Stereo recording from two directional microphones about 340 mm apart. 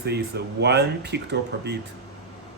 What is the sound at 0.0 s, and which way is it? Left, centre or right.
Speech, right.